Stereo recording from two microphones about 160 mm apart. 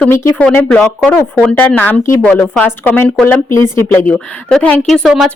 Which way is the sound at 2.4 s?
Centre (ahead or behind).